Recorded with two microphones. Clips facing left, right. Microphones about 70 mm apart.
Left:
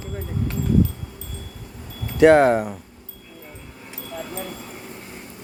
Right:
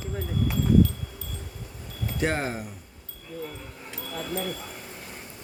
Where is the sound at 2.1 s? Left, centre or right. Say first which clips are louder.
Left 15 dB; left.